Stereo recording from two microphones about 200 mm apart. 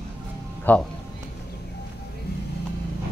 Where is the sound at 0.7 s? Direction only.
10° left (ahead or behind).